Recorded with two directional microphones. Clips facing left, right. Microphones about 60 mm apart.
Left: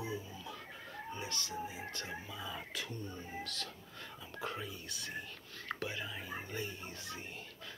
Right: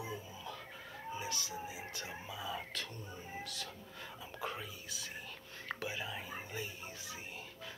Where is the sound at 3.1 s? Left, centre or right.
Centre.